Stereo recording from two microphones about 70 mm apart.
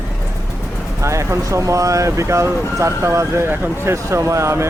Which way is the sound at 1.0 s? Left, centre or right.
Right.